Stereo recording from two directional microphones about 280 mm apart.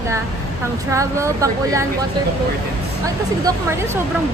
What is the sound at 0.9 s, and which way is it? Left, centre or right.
Speech, centre.